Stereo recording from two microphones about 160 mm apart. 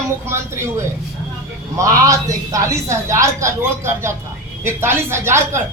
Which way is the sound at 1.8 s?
20° right (ahead or behind).